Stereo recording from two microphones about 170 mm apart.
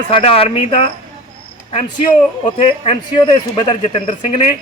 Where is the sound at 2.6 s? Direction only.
35° left (ahead or behind).